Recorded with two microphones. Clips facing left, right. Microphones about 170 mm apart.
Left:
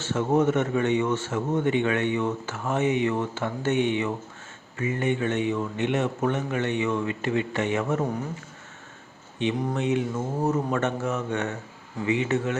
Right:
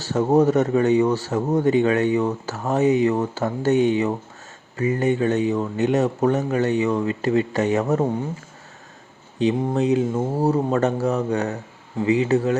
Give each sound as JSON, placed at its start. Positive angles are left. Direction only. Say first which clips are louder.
{"t": 0.0, "sound": "speech", "louder": "right 5 dB", "side_deg": -35}
{"t": 9.4, "sound": "speech", "louder": "right 6 dB", "side_deg": -35}